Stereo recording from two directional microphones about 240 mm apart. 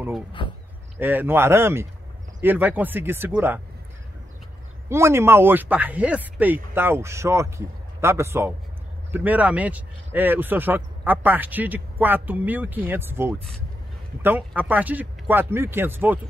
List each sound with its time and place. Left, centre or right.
0.4 s speech: left
0.9 s speech: centre
4.8 s speech: centre